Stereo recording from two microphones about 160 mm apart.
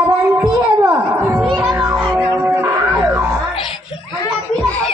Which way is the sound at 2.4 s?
10° right (ahead or behind).